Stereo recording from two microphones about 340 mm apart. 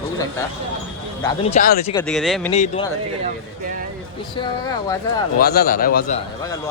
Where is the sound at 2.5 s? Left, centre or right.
Centre.